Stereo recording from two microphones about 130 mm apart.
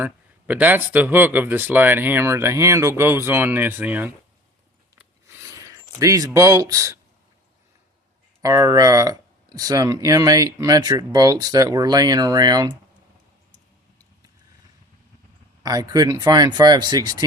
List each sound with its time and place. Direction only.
0.0 s speech: 10° right (ahead or behind)
4.9 s a sound: 20° right (ahead or behind)
8.4 s speech: 25° right (ahead or behind)
15.6 s speech: 30° right (ahead or behind)